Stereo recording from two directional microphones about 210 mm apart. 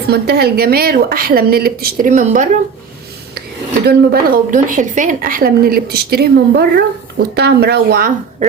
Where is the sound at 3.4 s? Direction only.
50° right (ahead or behind).